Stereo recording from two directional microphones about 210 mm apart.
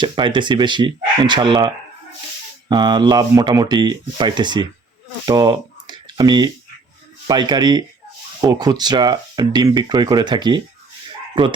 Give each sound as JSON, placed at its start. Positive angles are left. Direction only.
{"t": 0.0, "sound": "speech", "side_deg": -20}